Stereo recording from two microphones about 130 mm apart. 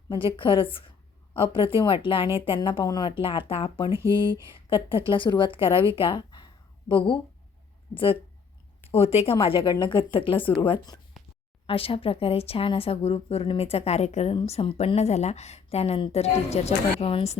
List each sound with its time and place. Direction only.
0.3 s speech: 40° left (ahead or behind)
3.2 s speech: 45° left (ahead or behind)
6.0 s a sound: 40° left (ahead or behind)
7.9 s speech: 45° left (ahead or behind)
11.6 s a woman's voice: 45° left (ahead or behind)